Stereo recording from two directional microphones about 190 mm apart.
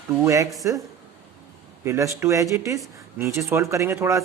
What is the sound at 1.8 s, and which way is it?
Speech, 15° right (ahead or behind).